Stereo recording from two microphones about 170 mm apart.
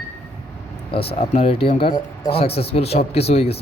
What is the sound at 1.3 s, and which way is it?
Speech, 35° left (ahead or behind).